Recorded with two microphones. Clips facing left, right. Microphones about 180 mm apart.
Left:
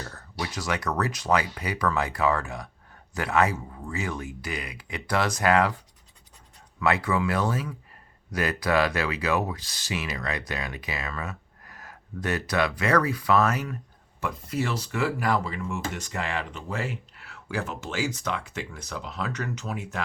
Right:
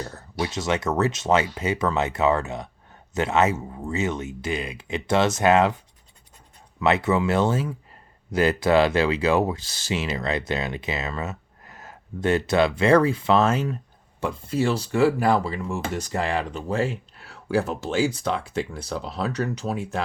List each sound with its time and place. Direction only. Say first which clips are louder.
0.0 s speech: right 6 dB; 25° right (ahead or behind)
6.7 s speech: right 4 dB; 25° right (ahead or behind)